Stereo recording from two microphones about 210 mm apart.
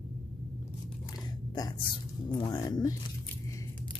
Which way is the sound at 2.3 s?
20° left (ahead or behind).